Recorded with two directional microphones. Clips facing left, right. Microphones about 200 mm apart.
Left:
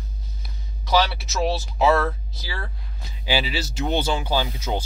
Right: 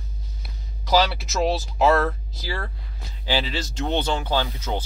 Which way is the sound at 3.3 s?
10° left (ahead or behind).